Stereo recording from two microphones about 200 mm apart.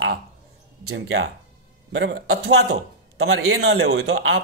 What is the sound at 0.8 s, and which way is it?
Speech, 85° right.